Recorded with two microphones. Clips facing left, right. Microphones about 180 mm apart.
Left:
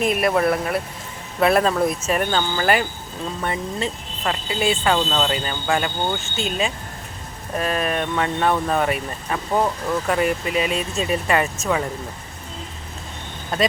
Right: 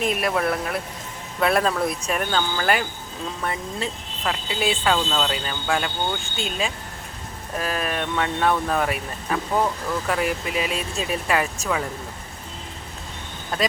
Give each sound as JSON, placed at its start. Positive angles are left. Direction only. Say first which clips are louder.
{"t": 0.0, "sound": "speech", "louder": "left 4 dB", "side_deg": 5}